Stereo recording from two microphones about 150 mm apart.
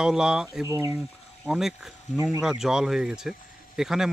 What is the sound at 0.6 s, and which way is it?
Speech, 20° right (ahead or behind).